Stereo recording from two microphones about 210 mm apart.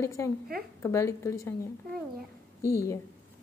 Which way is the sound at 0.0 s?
15° left (ahead or behind).